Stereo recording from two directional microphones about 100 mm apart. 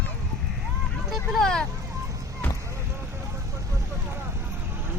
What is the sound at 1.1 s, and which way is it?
Vehicle, 5° left (ahead or behind).